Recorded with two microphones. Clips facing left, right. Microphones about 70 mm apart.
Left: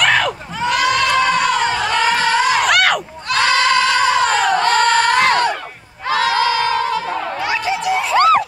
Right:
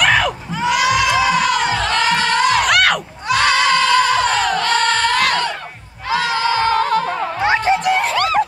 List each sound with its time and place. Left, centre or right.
0.0 s crowd: centre
4.6 s singing: left
6.4 s music: right
7.4 s a sound: right